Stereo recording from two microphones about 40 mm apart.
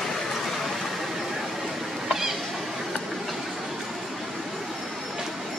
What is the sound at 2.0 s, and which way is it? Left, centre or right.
Cat, centre.